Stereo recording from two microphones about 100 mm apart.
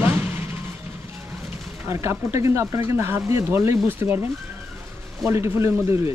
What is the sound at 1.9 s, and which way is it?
Speech, 30° right (ahead or behind).